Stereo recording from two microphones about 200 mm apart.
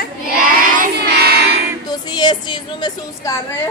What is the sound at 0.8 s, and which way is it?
Child singing, 50° right (ahead or behind).